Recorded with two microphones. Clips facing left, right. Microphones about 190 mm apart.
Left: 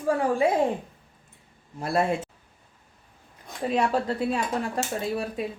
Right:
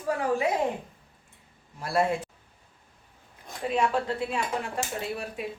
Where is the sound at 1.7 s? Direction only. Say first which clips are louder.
Left 1 dB; 25° left (ahead or behind).